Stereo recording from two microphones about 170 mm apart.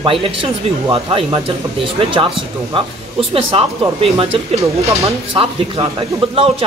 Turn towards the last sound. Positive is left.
turn(degrees=-30)  # may be behind; listen again after turning